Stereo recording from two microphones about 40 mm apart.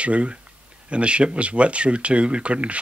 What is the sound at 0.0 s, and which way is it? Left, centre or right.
Speech, right.